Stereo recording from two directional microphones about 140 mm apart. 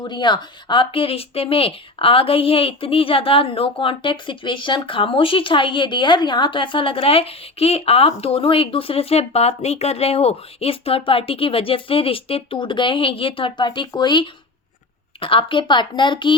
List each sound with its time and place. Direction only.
0.0 s a woman's voice: 35° left (ahead or behind)